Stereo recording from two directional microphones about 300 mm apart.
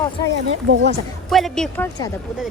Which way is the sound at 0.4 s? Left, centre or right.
Right.